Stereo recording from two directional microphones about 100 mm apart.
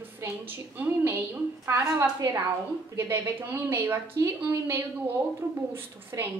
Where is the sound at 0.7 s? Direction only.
20° right (ahead or behind).